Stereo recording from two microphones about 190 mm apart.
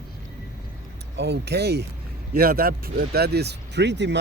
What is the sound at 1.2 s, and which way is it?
Speech, 60° right (ahead or behind).